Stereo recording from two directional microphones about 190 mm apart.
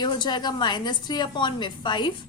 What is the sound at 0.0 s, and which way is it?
A woman's voice, 20° left (ahead or behind).